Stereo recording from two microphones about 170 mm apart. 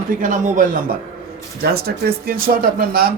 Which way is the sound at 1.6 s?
65° right (ahead or behind).